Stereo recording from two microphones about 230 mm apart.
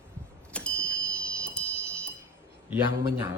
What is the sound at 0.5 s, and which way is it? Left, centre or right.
Vehicle, centre.